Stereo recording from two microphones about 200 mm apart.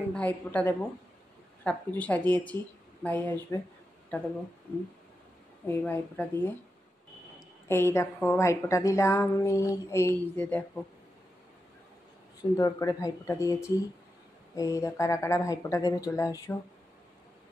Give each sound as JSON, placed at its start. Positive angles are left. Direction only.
{"t": 0.1, "sound": "a woman's voice", "side_deg": 5}
{"t": 5.7, "sound": "a woman's voice", "side_deg": 10}
{"t": 12.4, "sound": "a woman's voice", "side_deg": 20}